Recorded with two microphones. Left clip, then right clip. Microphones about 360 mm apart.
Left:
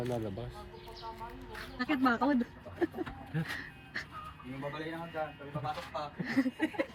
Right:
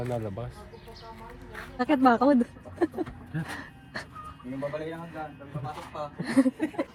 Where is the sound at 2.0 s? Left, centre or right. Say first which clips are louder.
Right 9 dB; right.